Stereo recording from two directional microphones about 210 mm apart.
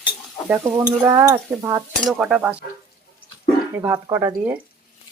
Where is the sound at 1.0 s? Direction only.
15° right (ahead or behind).